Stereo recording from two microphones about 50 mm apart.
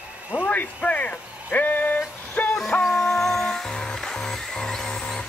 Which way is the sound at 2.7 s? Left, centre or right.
Left.